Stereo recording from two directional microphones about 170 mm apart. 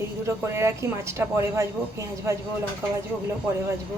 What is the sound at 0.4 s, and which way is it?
A woman's voice, 15° right (ahead or behind).